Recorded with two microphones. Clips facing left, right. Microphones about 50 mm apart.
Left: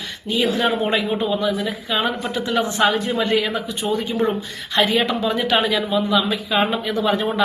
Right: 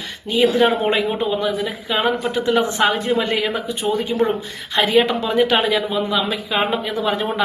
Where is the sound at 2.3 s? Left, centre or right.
Right.